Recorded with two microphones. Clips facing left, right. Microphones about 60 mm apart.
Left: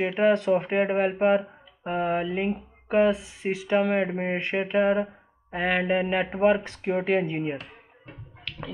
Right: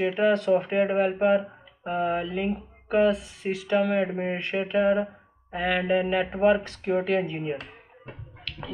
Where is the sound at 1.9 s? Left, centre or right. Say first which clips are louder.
Even; centre.